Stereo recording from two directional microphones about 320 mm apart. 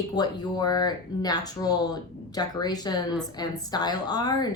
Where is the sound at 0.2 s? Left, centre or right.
Centre.